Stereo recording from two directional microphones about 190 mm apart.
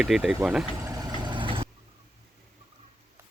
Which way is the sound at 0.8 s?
20° right (ahead or behind).